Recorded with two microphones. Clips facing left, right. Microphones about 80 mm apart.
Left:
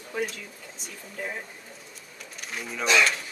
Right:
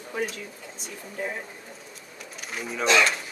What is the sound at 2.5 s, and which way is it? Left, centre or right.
Speech, centre.